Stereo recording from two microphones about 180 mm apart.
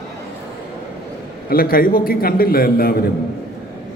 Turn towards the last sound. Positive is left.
turn(degrees=55)  # may be behind; listen again after turning